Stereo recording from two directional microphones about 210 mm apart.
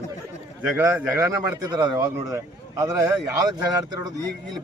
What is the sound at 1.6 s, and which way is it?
Speech, 20° right (ahead or behind).